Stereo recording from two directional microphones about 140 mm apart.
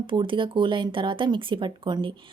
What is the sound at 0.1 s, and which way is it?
Speech, 35° right (ahead or behind).